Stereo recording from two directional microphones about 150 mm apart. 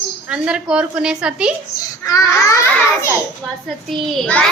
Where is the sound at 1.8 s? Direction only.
25° left (ahead or behind).